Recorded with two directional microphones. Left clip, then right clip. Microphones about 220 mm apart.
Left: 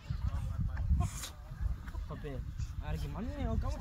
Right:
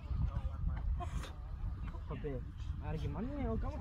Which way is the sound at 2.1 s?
65° left (ahead or behind).